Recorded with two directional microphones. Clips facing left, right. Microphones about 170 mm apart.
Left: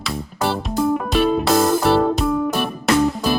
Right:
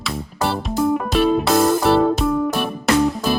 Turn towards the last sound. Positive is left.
turn(degrees=0)  # may be behind; listen again after turning